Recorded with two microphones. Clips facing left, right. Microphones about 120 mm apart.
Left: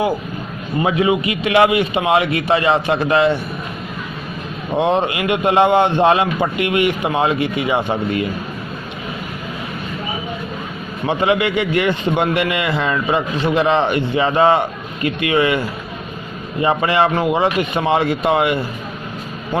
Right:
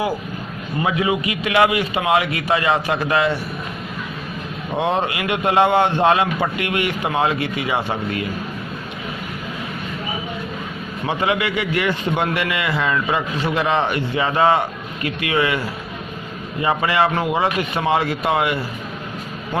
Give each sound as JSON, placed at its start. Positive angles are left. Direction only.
{"t": 0.8, "sound": "a man's voice", "side_deg": 25}
{"t": 4.8, "sound": "a man's voice", "side_deg": 25}
{"t": 11.2, "sound": "a man's voice", "side_deg": 25}